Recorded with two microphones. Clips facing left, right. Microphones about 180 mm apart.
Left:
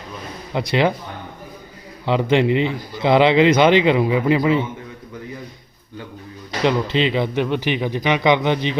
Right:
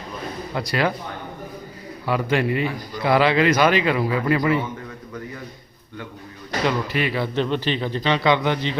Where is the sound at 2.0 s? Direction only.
20° left (ahead or behind).